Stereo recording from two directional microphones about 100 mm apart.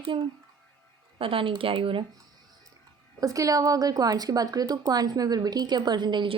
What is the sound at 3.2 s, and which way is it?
A woman's voice, 35° right (ahead or behind).